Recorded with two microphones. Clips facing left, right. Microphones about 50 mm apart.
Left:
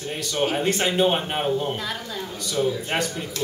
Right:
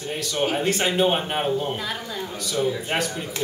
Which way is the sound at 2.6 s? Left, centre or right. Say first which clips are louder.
Even; centre.